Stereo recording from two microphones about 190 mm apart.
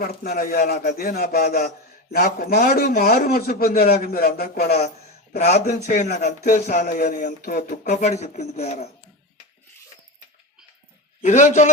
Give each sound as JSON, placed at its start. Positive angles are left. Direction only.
{"t": 0.0, "sound": "a man's voice", "side_deg": 50}
{"t": 5.8, "sound": "speech", "side_deg": 40}
{"t": 11.2, "sound": "speech", "side_deg": 40}